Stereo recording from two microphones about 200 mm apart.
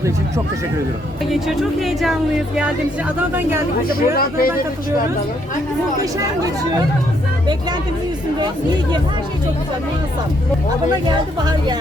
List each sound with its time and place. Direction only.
1.8 s speech: centre (ahead or behind)
3.2 s speech: 10° right (ahead or behind)
3.8 s speech: 45° left (ahead or behind)
8.4 s speech: 20° right (ahead or behind)
11.4 s speech: 20° right (ahead or behind)